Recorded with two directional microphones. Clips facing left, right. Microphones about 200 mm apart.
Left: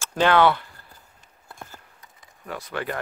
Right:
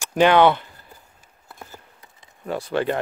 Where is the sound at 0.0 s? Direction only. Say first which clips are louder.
Right 3 dB; 15° right (ahead or behind).